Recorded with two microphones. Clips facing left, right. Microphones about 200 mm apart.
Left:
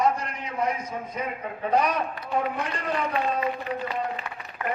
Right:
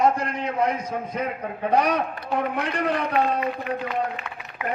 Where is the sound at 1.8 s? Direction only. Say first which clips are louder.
Right 3 dB; 70° right (ahead or behind).